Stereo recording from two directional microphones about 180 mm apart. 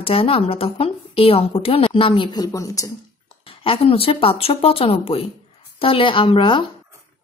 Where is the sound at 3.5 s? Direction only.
30° left (ahead or behind).